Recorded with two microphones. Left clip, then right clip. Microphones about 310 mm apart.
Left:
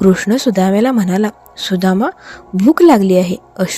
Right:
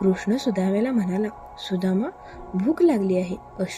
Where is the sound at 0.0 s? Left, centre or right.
Left.